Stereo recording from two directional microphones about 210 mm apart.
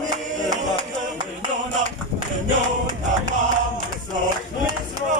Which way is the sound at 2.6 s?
35° right (ahead or behind).